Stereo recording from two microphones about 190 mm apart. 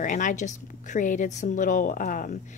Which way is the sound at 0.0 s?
45° left (ahead or behind).